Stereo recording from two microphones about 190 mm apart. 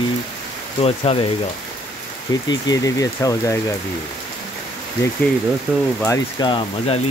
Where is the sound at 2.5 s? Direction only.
20° left (ahead or behind).